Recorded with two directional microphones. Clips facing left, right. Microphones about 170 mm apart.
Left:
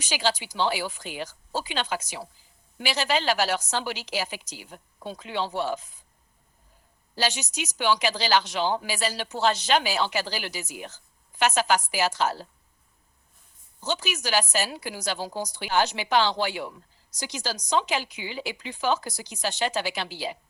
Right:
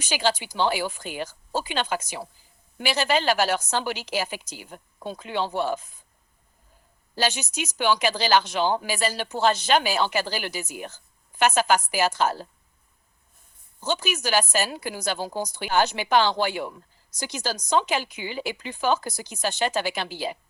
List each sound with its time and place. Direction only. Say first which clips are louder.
0.0 s a woman's voice: right 2 dB; 50° right (ahead or behind)
7.2 s a woman's voice: right 2 dB; 50° right (ahead or behind)
13.8 s a woman's voice: right 3 dB; 50° right (ahead or behind)